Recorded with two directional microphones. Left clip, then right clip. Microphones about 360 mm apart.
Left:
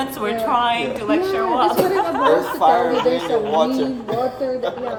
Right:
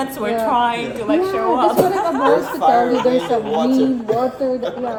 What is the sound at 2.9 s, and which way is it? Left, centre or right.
Speech, centre.